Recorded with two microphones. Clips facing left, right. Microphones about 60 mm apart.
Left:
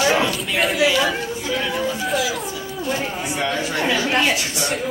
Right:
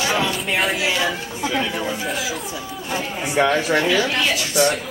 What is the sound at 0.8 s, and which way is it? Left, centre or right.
Speech, right.